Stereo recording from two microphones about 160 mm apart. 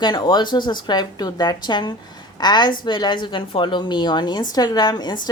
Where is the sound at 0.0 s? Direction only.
25° left (ahead or behind).